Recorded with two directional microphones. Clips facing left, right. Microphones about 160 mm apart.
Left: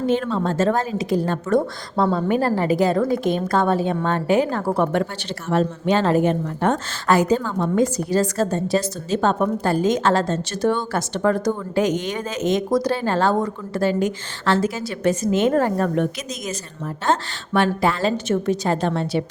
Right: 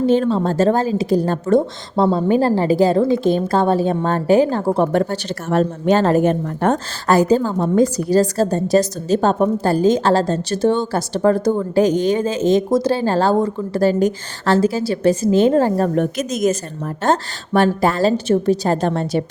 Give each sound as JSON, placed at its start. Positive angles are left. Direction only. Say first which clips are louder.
{"t": 0.0, "sound": "a woman's voice", "louder": "right 5 dB", "side_deg": -35}
{"t": 4.9, "sound": "a woman's voice", "louder": "right 4 dB", "side_deg": -40}